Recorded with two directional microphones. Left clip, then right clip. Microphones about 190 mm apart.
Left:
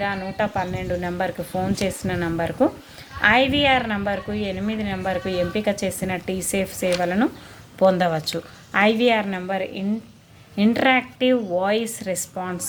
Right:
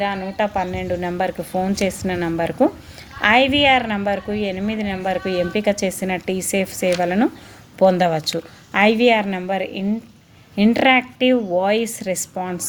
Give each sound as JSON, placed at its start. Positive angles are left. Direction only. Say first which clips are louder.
{"t": 0.0, "sound": "a woman's voice", "louder": "right 3 dB", "side_deg": -30}